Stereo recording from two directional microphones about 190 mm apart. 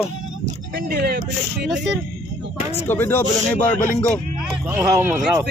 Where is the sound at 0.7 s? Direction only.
60° right (ahead or behind).